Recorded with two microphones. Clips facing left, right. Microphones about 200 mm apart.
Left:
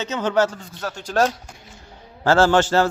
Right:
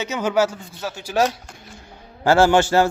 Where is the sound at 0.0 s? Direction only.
10° right (ahead or behind).